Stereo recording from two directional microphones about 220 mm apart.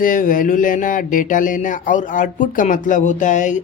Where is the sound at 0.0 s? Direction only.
35° left (ahead or behind).